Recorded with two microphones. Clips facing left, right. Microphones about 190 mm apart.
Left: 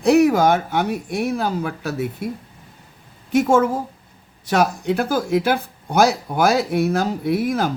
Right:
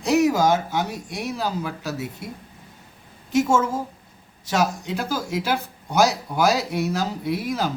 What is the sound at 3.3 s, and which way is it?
Speech, 55° left (ahead or behind).